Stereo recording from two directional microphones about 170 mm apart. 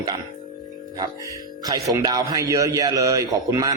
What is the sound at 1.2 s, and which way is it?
Speech, 20° right (ahead or behind).